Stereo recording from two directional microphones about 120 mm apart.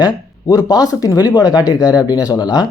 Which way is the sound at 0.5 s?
30° left (ahead or behind).